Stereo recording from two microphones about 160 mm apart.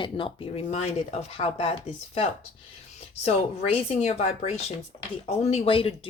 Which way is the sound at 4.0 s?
40° left (ahead or behind).